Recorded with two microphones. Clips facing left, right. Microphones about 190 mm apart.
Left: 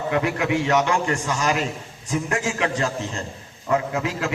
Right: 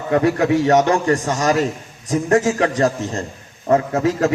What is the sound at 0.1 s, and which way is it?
A man's voice, 35° right (ahead or behind).